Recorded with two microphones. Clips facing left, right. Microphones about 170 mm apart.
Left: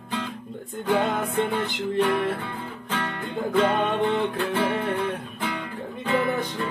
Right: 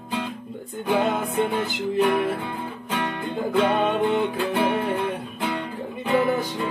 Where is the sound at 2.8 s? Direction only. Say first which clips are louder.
Right 3 dB; 15° right (ahead or behind).